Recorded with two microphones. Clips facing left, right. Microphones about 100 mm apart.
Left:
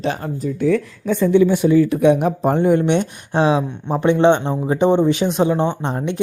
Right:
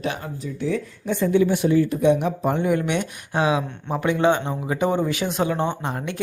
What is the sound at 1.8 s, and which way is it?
Speech, 60° left (ahead or behind).